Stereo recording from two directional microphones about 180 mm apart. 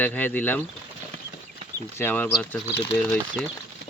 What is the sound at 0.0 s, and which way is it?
Speech, 10° left (ahead or behind).